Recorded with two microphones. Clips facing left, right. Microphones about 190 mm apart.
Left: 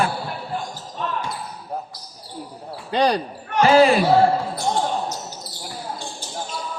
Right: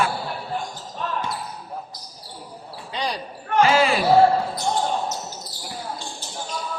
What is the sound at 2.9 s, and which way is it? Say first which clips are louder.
Speech: left 9 dB; 65° left (ahead or behind).